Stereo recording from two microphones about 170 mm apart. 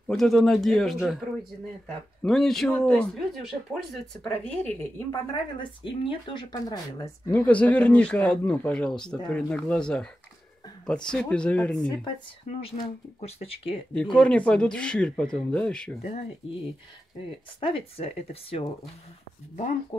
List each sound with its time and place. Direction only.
0.1 s speech: centre (ahead or behind)
2.2 s speech: centre (ahead or behind)
4.2 s speech: 10° left (ahead or behind)
5.6 s speech: 30° left (ahead or behind)
7.2 s speech: 10° left (ahead or behind)
12.4 s speech: 35° left (ahead or behind)
14.1 s speech: 5° left (ahead or behind)
17.6 s speech: 30° left (ahead or behind)
19.9 s speech: 35° left (ahead or behind)